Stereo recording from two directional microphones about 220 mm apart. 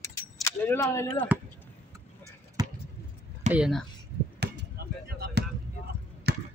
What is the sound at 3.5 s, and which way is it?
Speech, centre (ahead or behind).